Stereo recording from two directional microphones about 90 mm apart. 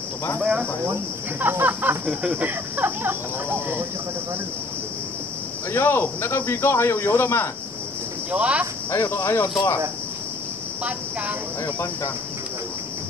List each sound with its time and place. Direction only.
0.4 s cricket: 15° right (ahead or behind)
5.7 s speech: 25° left (ahead or behind)
8.3 s speech: 15° right (ahead or behind)
8.9 s speech: 30° left (ahead or behind)